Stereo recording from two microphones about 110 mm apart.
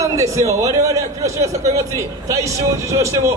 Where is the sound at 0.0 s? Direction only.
30° right (ahead or behind).